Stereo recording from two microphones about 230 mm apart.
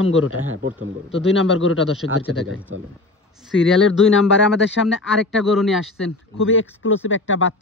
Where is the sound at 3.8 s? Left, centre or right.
Left.